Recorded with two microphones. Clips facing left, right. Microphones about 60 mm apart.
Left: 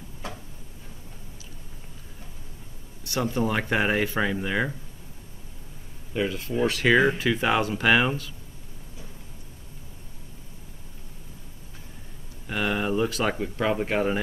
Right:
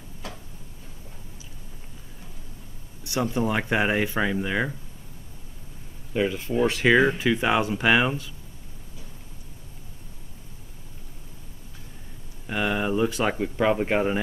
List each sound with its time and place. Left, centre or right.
3.0 s speech: centre
6.1 s speech: centre
6.9 s speech: centre
12.4 s speech: centre